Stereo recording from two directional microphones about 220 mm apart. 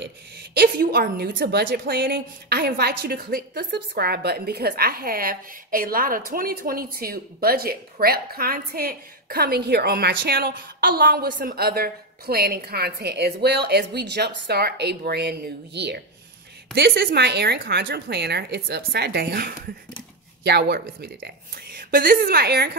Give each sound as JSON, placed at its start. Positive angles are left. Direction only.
{"t": 0.6, "sound": "a woman's voice", "side_deg": -45}